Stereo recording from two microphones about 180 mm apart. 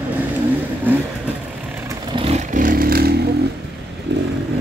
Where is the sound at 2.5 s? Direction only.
50° right (ahead or behind).